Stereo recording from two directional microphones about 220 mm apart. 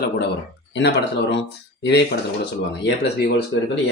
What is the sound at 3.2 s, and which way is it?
Speech, 50° left (ahead or behind).